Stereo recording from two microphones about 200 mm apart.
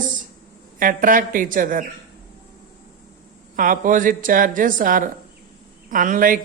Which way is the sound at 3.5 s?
45° right (ahead or behind).